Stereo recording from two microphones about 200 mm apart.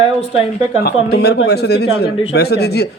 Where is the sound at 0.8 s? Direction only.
50° left (ahead or behind).